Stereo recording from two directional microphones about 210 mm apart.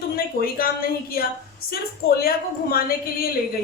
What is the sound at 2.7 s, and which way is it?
Speech, 45° left (ahead or behind).